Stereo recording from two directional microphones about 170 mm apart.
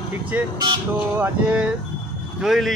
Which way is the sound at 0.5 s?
25° right (ahead or behind).